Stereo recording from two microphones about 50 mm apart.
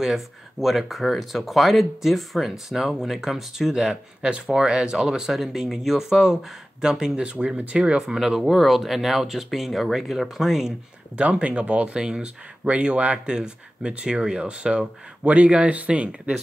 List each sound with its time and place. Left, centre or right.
0.0 s speech: centre
8.4 s speech: centre
11.1 s speech: right